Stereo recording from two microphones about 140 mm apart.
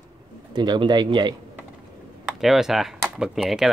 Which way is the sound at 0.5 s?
30° right (ahead or behind).